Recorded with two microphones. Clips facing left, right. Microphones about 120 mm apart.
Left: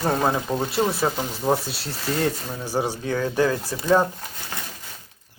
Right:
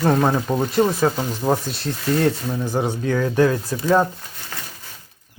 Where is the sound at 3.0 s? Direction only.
30° left (ahead or behind).